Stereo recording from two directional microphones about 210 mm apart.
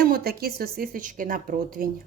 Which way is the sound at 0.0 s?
45° right (ahead or behind).